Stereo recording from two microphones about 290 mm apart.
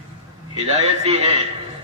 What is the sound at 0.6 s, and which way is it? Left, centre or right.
Speech, right.